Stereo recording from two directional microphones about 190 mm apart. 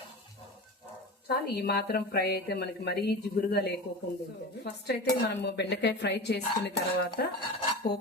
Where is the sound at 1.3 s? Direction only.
55° left (ahead or behind).